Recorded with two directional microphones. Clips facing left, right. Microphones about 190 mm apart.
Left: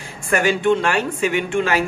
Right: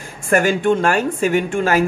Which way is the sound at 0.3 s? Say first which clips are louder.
Right 2 dB; 45° right (ahead or behind).